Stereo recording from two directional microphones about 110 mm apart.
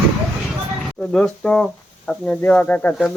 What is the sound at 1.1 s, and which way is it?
Speech, 5° left (ahead or behind).